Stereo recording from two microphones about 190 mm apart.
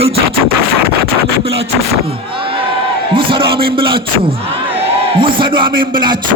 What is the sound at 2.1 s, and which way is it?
A man's voice, 30° right (ahead or behind).